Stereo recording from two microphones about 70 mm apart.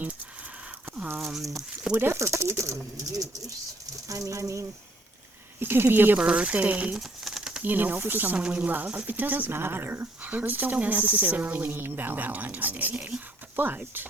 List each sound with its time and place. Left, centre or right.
1.1 s speech: centre
1.9 s speech: right
4.1 s speech: right
5.5 s speech: right
6.1 s speech: centre
6.9 s a sound: centre
7.6 s speech: right
8.4 s speech: centre